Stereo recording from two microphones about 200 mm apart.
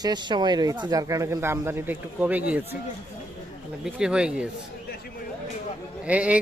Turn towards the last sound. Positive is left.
turn(degrees=-5)  # may be behind; listen again after turning